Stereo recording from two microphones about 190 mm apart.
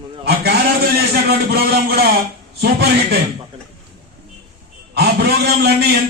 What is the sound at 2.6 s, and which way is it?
Speech, 60° right (ahead or behind).